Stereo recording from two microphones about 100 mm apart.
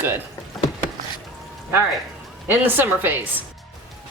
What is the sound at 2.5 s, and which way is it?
Speech, 20° right (ahead or behind).